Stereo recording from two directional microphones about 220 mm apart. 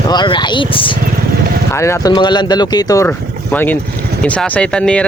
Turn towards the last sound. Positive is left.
turn(degrees=5)  # may be behind; listen again after turning